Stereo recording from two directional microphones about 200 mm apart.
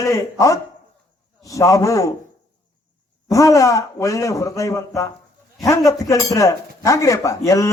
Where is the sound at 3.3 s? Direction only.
15° left (ahead or behind).